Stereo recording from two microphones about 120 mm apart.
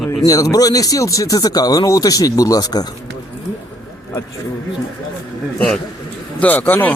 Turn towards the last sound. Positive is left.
turn(degrees=15)  # may be behind; listen again after turning